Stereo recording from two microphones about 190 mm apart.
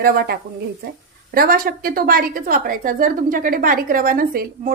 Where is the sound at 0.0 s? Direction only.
50° right (ahead or behind).